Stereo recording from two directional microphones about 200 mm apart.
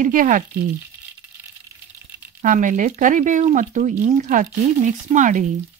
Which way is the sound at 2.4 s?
40° right (ahead or behind).